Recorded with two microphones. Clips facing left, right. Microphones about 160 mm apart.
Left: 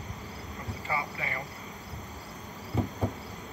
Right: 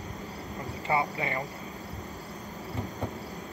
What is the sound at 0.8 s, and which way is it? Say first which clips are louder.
Speech: right 6 dB; 25° right (ahead or behind).